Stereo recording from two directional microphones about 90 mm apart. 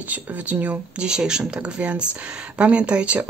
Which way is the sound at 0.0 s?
15° right (ahead or behind).